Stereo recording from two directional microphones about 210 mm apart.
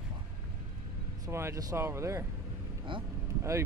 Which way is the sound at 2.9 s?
25° right (ahead or behind).